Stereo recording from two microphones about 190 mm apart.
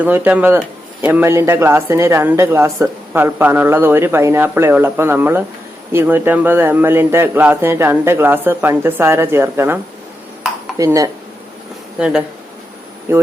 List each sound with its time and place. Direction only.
0.0 s speech: 10° right (ahead or behind)
10.8 s speech: 15° right (ahead or behind)
11.9 s speech: 5° right (ahead or behind)